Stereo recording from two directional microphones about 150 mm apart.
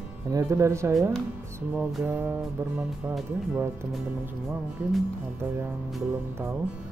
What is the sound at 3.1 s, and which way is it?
Speech, centre (ahead or behind).